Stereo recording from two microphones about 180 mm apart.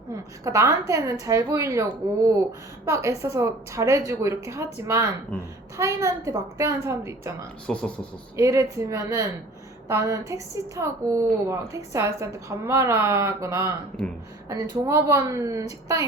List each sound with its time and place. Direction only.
0.1 s a woman's voice: 15° right (ahead or behind)
7.7 s speech: 5° left (ahead or behind)
8.4 s a woman's voice: 20° right (ahead or behind)
14.0 s a woman's voice: 5° left (ahead or behind)
14.5 s a woman's voice: 15° right (ahead or behind)